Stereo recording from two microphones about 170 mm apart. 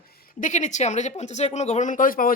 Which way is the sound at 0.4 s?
45° left (ahead or behind).